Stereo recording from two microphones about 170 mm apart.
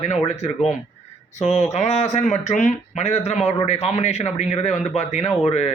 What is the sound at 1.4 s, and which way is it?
Speech, 40° left (ahead or behind).